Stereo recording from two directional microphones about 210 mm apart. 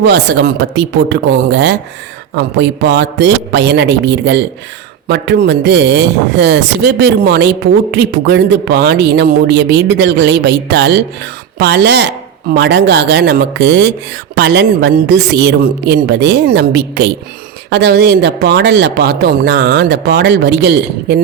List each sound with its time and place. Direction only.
0.0 s a man's voice: 55° right (ahead or behind)